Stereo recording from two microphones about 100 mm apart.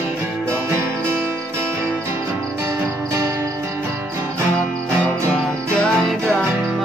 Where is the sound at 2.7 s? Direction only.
25° right (ahead or behind).